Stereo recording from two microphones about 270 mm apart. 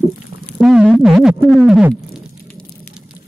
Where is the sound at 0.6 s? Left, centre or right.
Centre.